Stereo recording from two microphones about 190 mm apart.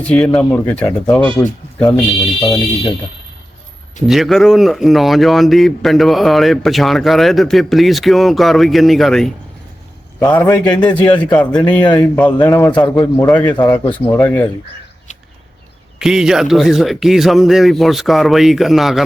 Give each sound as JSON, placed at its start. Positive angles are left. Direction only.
{"t": 0.0, "sound": "a man's voice", "side_deg": 5}
{"t": 2.4, "sound": "speech", "side_deg": 20}
{"t": 4.0, "sound": "a man's voice", "side_deg": 0}
{"t": 13.7, "sound": "speech", "side_deg": 30}
{"t": 14.2, "sound": "a man's voice", "side_deg": 10}
{"t": 16.0, "sound": "a man's voice", "side_deg": -5}